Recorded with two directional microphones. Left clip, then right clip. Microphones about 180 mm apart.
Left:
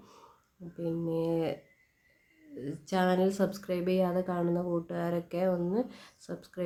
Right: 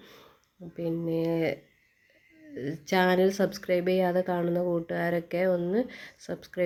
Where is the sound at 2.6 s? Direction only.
20° right (ahead or behind).